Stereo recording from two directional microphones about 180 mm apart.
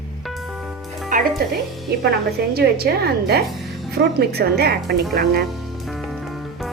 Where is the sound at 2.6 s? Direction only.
60° right (ahead or behind).